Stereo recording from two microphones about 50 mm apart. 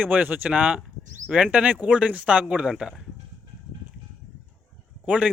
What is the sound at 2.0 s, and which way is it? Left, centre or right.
Speech, right.